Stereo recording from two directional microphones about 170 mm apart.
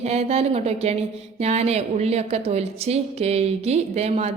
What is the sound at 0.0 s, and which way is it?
A woman's voice, 40° right (ahead or behind).